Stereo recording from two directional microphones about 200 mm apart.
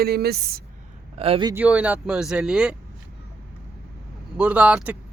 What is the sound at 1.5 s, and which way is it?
Speech, 5° right (ahead or behind).